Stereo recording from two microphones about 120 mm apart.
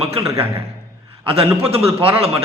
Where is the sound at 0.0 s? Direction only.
55° right (ahead or behind).